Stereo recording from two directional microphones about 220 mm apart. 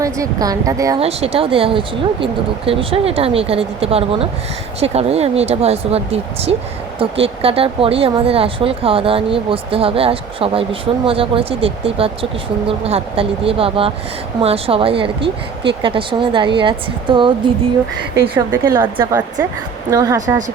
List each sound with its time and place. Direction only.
0.0 s a woman's voice: 15° right (ahead or behind)
1.0 s a woman's voice: 25° right (ahead or behind)